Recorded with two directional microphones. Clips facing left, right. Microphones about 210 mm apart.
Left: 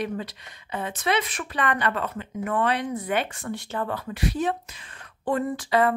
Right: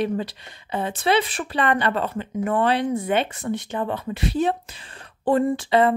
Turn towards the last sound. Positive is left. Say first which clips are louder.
# right 4 dB
turn(degrees=-25)  # may be behind; listen again after turning